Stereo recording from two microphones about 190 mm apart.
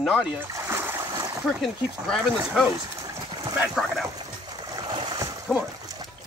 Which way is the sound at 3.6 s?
Centre (ahead or behind).